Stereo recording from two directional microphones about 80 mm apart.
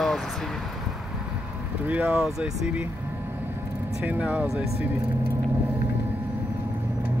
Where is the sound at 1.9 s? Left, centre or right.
Centre.